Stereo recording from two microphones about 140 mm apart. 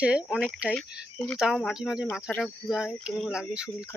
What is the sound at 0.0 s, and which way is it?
Speech, 5° right (ahead or behind).